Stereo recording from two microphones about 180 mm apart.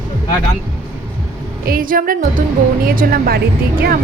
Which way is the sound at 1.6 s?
50° right (ahead or behind).